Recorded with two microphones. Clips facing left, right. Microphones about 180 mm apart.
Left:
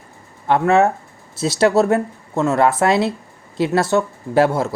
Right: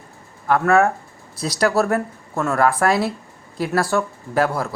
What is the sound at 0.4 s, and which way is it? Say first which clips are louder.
Speech: left 2 dB; 25° left (ahead or behind).